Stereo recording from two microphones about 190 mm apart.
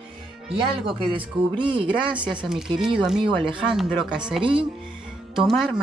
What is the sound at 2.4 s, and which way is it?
Speech, 5° right (ahead or behind).